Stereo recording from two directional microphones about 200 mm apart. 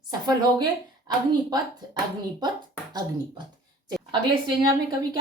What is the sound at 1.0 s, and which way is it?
Speech, 20° right (ahead or behind).